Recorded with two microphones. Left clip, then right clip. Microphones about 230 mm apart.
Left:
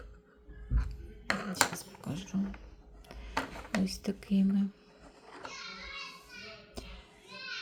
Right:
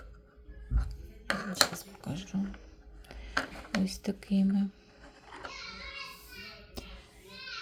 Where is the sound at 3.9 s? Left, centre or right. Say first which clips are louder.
Right 1 dB; centre.